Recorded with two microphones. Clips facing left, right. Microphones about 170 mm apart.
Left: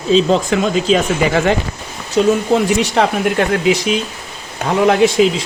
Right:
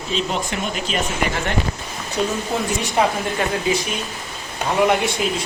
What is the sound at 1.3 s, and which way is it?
Speech, 90° left.